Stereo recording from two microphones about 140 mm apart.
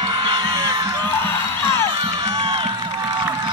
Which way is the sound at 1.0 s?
15° left (ahead or behind).